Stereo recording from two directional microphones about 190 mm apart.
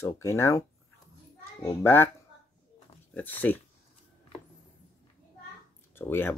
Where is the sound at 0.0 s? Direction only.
15° left (ahead or behind).